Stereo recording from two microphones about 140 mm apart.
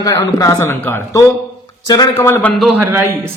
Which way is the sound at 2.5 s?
Centre (ahead or behind).